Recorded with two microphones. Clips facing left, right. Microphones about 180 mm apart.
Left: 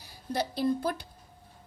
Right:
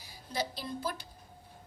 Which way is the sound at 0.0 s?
60° left (ahead or behind).